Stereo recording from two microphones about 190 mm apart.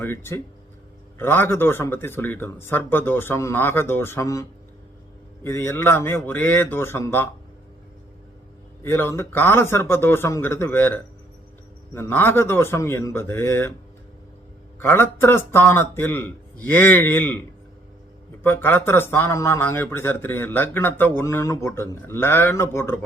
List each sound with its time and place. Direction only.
0.0 s speech: 10° left (ahead or behind)
8.8 s speech: 10° left (ahead or behind)
14.8 s speech: 10° left (ahead or behind)
18.4 s speech: 10° left (ahead or behind)